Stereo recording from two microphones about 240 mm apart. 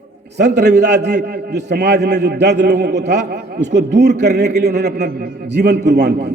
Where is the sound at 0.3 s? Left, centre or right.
Right.